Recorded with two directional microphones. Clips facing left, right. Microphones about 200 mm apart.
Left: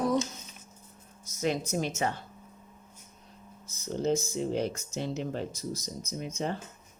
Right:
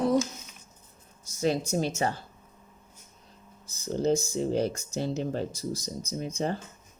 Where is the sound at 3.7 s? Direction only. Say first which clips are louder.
Right 3 dB; 35° right (ahead or behind).